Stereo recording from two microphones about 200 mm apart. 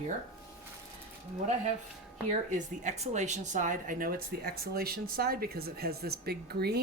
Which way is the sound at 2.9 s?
35° right (ahead or behind).